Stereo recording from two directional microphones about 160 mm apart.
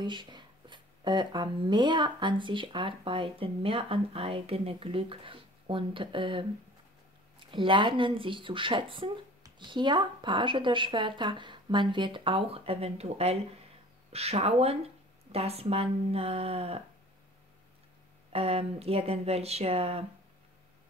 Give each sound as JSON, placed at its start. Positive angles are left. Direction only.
{"t": 0.0, "sound": "speech", "side_deg": -30}
{"t": 18.3, "sound": "speech", "side_deg": -40}